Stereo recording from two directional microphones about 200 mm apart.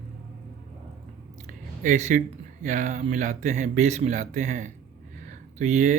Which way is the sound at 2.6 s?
40° right (ahead or behind).